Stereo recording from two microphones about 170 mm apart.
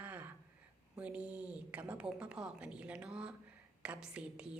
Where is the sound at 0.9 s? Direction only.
10° right (ahead or behind).